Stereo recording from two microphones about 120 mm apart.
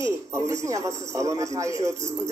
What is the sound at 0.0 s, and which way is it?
Speech, 25° right (ahead or behind).